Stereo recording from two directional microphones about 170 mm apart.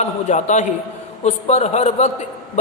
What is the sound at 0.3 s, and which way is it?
A man's voice, 45° left (ahead or behind).